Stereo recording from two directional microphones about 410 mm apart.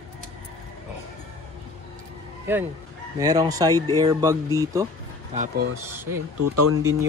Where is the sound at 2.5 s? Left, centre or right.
Centre.